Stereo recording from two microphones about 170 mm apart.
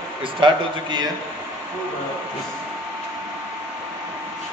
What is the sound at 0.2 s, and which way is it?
Speech, 25° right (ahead or behind).